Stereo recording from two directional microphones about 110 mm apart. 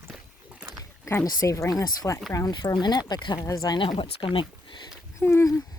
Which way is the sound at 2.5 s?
40° left (ahead or behind).